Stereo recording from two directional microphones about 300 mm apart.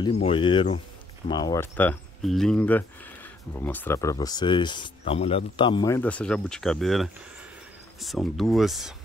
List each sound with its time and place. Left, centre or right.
0.0 s speech: centre